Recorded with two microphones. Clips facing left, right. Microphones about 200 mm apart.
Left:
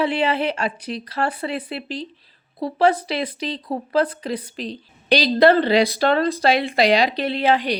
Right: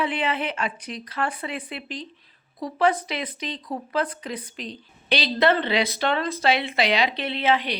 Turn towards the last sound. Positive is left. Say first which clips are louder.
# left 4 dB
turn(degrees=40)  # may be behind; listen again after turning